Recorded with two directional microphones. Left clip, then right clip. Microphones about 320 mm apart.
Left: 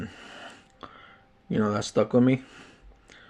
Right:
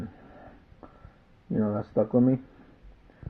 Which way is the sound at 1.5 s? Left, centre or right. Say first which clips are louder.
Left 3 dB; left.